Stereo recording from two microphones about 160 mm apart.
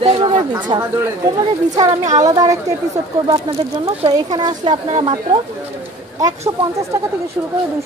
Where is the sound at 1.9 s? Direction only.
50° right (ahead or behind).